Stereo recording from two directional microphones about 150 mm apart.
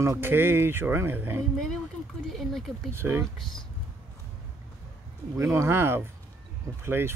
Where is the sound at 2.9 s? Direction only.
15° right (ahead or behind).